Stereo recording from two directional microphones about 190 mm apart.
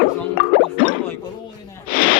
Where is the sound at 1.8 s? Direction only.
45° left (ahead or behind).